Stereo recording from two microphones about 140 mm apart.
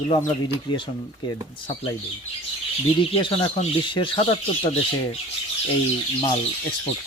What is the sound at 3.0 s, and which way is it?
Speech, 40° left (ahead or behind).